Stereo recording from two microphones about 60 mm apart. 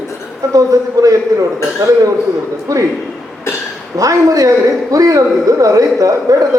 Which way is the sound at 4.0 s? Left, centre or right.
Right.